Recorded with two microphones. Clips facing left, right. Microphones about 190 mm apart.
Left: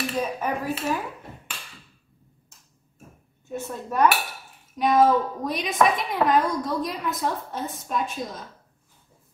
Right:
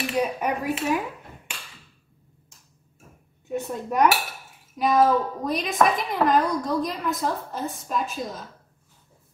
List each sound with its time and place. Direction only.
0.1 s speech: 15° right (ahead or behind)
3.4 s speech: 15° right (ahead or behind)
4.7 s a woman's voice: centre (ahead or behind)